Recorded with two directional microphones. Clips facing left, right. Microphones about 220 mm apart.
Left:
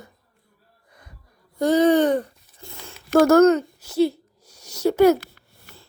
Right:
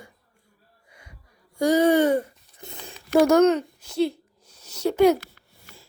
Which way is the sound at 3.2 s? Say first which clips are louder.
Left 3 dB; 5° left (ahead or behind).